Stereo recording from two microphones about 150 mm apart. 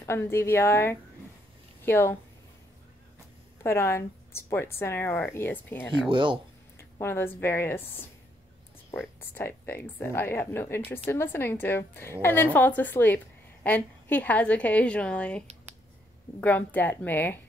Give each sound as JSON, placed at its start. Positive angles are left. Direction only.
{"t": 0.0, "sound": "speech", "side_deg": 15}
{"t": 3.6, "sound": "speech", "side_deg": 15}
{"t": 6.0, "sound": "speech", "side_deg": -35}
{"t": 6.8, "sound": "a woman's voice", "side_deg": 15}
{"t": 8.9, "sound": "speech", "side_deg": 15}